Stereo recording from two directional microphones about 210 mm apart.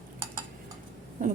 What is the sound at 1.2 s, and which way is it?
Speech, 40° right (ahead or behind).